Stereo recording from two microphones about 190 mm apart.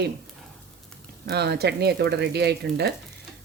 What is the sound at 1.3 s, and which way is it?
Speech, 55° right (ahead or behind).